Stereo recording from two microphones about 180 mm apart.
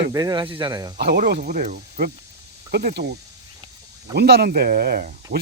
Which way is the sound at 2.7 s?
60° right (ahead or behind).